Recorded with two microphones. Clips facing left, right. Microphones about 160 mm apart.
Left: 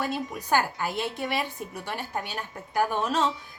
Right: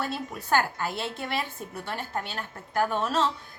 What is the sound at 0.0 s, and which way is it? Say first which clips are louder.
A woman's voice: left 2 dB; 15° left (ahead or behind).